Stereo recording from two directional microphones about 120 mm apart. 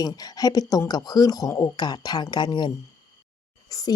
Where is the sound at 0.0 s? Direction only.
30° left (ahead or behind).